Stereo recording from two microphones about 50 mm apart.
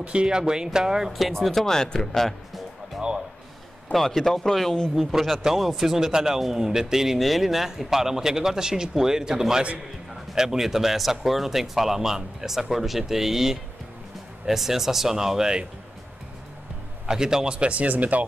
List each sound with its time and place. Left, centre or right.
0.0 s speech: right
1.1 s speech: centre
3.9 s speech: centre
4.9 s speech: centre
17.0 s speech: centre; by 18.2 s right